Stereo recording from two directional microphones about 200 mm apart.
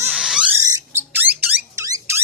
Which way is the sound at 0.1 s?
Centre (ahead or behind).